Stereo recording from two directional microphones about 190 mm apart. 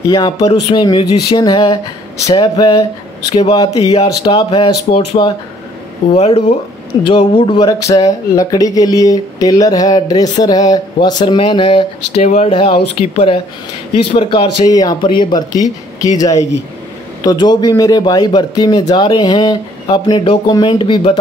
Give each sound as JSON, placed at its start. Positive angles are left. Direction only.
{"t": 0.4, "sound": "speech", "side_deg": 30}
{"t": 16.3, "sound": "speech", "side_deg": 35}
{"t": 17.2, "sound": "speech", "side_deg": 20}